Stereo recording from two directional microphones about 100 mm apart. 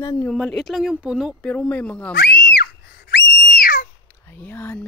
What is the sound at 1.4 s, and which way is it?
Speech, 10° left (ahead or behind).